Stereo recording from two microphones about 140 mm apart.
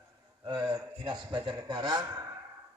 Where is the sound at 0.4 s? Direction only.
30° right (ahead or behind).